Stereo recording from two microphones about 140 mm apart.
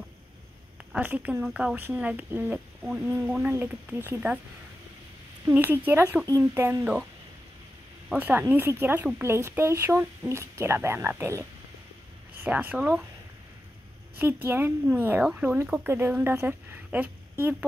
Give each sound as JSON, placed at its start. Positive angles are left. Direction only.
{"t": 0.9, "sound": "speech", "side_deg": -10}
{"t": 5.4, "sound": "speech", "side_deg": -15}
{"t": 8.1, "sound": "speech", "side_deg": -10}
{"t": 12.4, "sound": "speech", "side_deg": -10}
{"t": 14.1, "sound": "speech", "side_deg": -15}